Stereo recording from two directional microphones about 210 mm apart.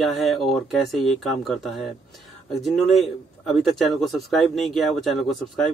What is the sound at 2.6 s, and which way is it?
Speech, centre (ahead or behind).